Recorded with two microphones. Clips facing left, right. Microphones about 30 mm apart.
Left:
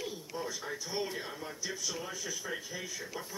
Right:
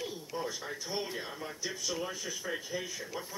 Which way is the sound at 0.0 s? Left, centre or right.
Centre.